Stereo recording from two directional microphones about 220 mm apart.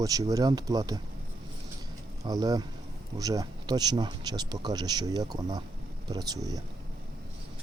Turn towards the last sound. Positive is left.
turn(degrees=-15)  # may be behind; listen again after turning